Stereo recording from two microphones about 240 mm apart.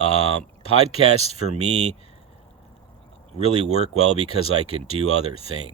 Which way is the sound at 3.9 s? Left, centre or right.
Right.